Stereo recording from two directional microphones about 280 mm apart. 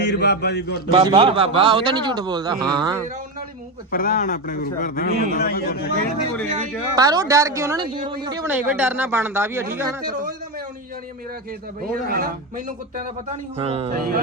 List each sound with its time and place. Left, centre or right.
0.0 s a man's voice: left
0.9 s a man's voice: centre
3.9 s a man's voice: left
6.9 s a man's voice: centre
11.8 s a man's voice: right